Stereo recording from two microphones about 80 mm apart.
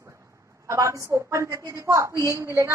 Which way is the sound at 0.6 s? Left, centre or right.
Right.